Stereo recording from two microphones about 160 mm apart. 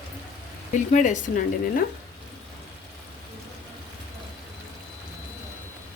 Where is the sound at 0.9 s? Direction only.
50° left (ahead or behind).